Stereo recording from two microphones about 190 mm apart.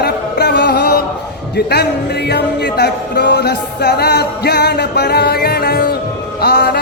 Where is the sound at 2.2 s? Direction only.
60° left (ahead or behind).